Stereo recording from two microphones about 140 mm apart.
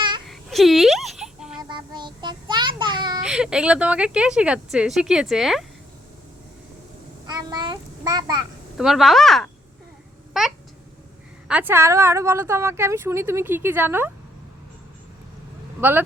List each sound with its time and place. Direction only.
0.3 s a sound: centre (ahead or behind)
1.7 s child singing: 35° right (ahead or behind)
3.2 s speech: 5° right (ahead or behind)
7.3 s a child's voice: 30° right (ahead or behind)
8.8 s speech: centre (ahead or behind)
11.4 s a woman's voice: 10° right (ahead or behind)
15.8 s a woman's voice: 15° right (ahead or behind)